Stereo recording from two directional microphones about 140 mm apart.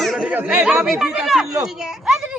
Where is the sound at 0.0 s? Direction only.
5° right (ahead or behind).